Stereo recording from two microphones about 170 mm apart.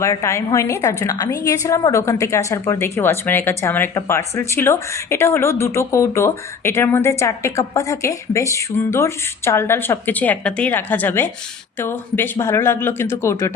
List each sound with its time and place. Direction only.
0.0 s a woman's voice: 15° left (ahead or behind)